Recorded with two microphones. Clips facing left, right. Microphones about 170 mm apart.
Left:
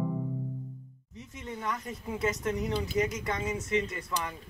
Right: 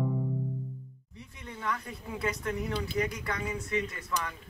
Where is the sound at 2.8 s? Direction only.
20° left (ahead or behind).